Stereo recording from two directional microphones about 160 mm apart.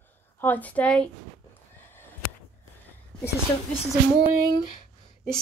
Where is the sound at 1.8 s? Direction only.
15° left (ahead or behind).